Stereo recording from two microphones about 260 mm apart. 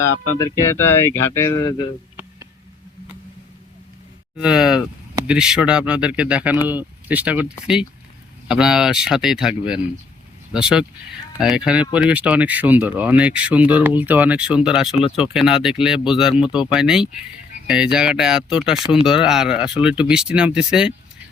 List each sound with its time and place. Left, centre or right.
1.0 s speech: centre
4.4 s speech: centre
14.9 s speech: left
15.2 s speech: centre